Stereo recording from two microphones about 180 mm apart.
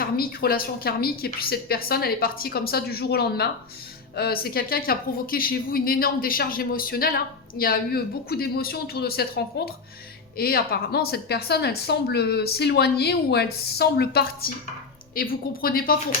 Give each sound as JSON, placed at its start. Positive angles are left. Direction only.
{"t": 0.0, "sound": "a woman's voice", "side_deg": 55}